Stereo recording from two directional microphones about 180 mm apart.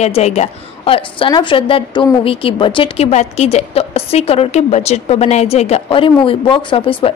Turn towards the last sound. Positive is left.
turn(degrees=30)  # may be behind; listen again after turning